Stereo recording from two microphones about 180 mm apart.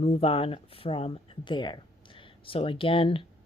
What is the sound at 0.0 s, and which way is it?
Speech, 35° left (ahead or behind).